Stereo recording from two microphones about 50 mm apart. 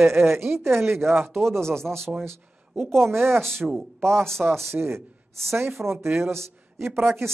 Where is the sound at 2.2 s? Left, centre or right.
Right.